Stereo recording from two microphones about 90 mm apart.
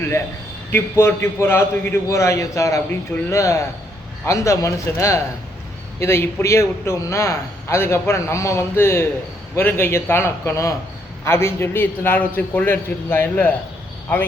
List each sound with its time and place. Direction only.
0.7 s a man's voice: 30° left (ahead or behind)